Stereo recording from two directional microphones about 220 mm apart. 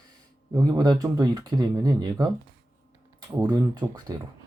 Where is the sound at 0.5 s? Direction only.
15° right (ahead or behind).